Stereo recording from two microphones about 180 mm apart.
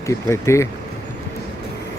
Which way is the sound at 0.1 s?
15° left (ahead or behind).